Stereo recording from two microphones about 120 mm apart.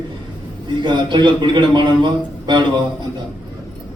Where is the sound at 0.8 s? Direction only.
40° right (ahead or behind).